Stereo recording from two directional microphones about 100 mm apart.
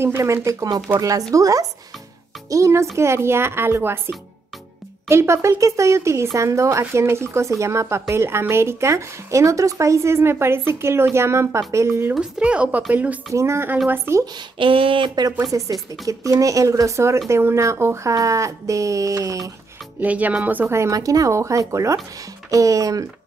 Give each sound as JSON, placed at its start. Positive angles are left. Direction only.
{"t": 0.0, "sound": "speech", "side_deg": -25}
{"t": 5.0, "sound": "speech", "side_deg": -25}
{"t": 12.2, "sound": "speech", "side_deg": -10}
{"t": 13.3, "sound": "speech", "side_deg": -30}
{"t": 14.6, "sound": "speech", "side_deg": -60}
{"t": 20.0, "sound": "speech", "side_deg": -15}
{"t": 20.8, "sound": "speech", "side_deg": -35}